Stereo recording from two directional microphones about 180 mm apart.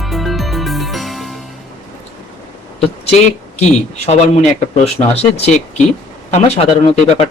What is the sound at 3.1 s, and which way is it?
Speech, 35° left (ahead or behind).